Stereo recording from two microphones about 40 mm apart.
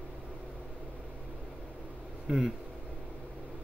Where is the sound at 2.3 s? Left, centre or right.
Centre.